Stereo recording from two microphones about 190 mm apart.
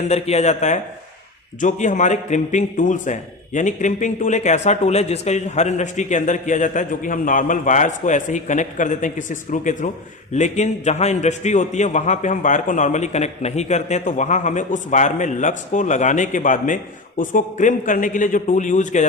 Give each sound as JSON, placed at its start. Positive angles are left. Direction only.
{"t": 0.1, "sound": "a man's voice", "side_deg": 35}